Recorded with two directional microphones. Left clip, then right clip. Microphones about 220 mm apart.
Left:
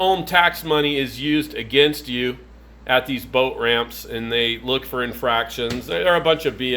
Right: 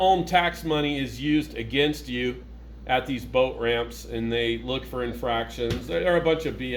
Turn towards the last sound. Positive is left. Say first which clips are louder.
# left 6 dB
turn(degrees=30)  # may be behind; listen again after turning